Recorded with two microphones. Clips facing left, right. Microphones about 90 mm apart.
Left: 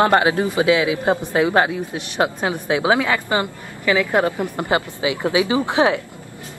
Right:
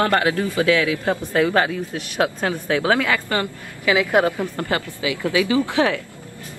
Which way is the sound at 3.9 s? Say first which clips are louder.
Even; 15° right (ahead or behind).